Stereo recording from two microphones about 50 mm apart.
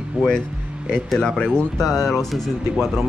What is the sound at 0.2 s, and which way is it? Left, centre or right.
Speech, centre.